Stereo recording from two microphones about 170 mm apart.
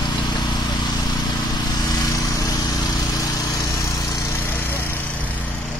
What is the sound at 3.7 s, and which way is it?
Lawn mower, 20° left (ahead or behind).